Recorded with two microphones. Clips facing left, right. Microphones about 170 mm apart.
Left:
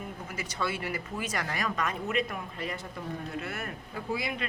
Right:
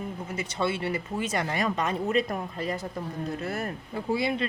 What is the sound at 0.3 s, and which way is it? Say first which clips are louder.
Speech: right 5 dB; 25° right (ahead or behind).